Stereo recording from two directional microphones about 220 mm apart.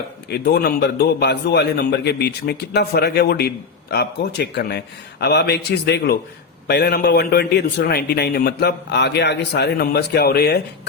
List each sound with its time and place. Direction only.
0.3 s a man's voice: 45° left (ahead or behind)